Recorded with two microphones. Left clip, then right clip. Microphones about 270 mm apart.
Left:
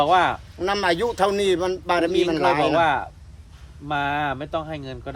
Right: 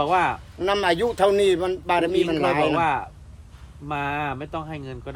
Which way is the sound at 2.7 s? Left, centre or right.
Left.